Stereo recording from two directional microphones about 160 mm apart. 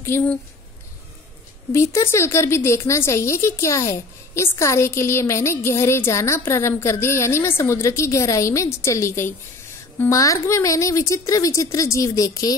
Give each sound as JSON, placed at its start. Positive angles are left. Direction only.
{"t": 0.0, "sound": "a woman's voice", "side_deg": 10}
{"t": 1.7, "sound": "a woman's voice", "side_deg": 15}